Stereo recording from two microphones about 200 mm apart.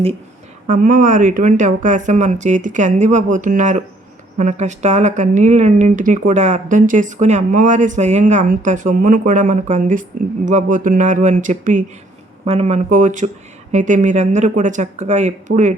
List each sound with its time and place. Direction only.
0.7 s speech: 40° right (ahead or behind)